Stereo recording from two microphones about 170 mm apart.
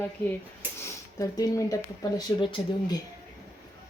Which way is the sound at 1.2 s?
20° left (ahead or behind).